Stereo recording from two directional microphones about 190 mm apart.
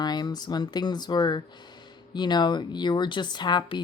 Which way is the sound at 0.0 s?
20° left (ahead or behind).